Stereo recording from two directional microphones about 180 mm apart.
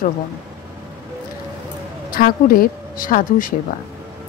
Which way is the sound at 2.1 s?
55° left (ahead or behind).